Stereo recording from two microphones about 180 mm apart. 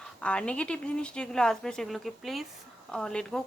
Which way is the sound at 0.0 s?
5° left (ahead or behind).